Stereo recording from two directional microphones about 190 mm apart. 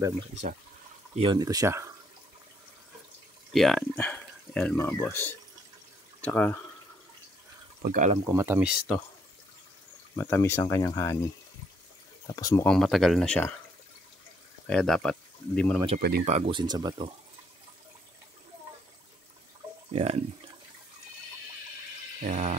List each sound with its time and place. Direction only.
1.1 s speech: 25° right (ahead or behind)
3.5 s speech: centre (ahead or behind)
7.8 s speech: 45° right (ahead or behind)
8.3 s speech: 10° right (ahead or behind)
10.1 s speech: 10° left (ahead or behind)
12.3 s speech: 20° left (ahead or behind)
12.6 s speech: centre (ahead or behind)
14.7 s speech: 5° left (ahead or behind)
16.0 s speech: 55° right (ahead or behind)
16.3 s speech: 30° right (ahead or behind)
19.9 s speech: 30° right (ahead or behind)
22.2 s speech: 35° right (ahead or behind)